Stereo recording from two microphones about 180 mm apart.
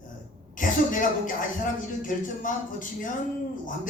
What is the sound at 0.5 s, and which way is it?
Speech, 45° left (ahead or behind).